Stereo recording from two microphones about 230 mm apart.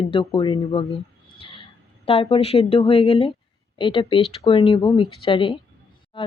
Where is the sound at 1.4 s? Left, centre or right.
Left.